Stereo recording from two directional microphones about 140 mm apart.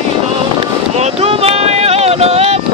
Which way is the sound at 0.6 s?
45° right (ahead or behind).